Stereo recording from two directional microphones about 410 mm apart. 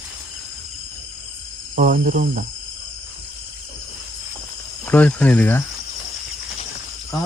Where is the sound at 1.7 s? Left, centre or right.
Centre.